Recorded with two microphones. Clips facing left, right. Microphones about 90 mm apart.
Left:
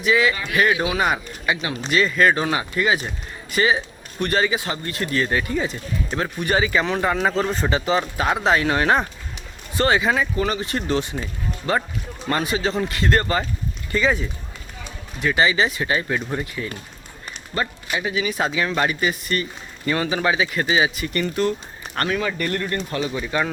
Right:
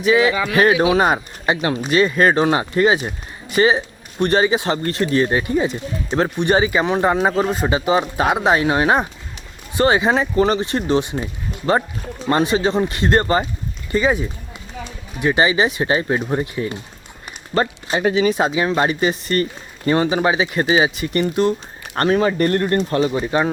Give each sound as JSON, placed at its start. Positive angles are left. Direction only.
{"t": 0.0, "sound": "speech", "side_deg": -25}
{"t": 12.3, "sound": "speech", "side_deg": -30}
{"t": 18.1, "sound": "speech", "side_deg": -30}
{"t": 21.9, "sound": "speech", "side_deg": -35}